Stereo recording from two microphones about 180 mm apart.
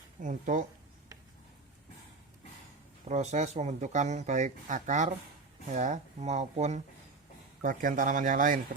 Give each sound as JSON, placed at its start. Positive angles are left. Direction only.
{"t": 0.2, "sound": "speech", "side_deg": -45}
{"t": 3.1, "sound": "speech", "side_deg": -40}